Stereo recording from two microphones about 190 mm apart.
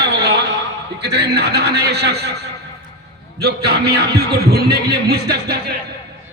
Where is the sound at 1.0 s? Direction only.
60° right (ahead or behind).